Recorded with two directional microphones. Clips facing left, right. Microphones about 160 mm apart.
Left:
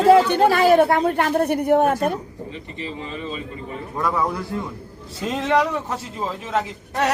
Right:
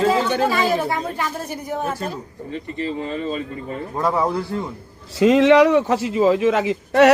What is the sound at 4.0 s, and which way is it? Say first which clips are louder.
Speech: right 2 dB; 30° right (ahead or behind).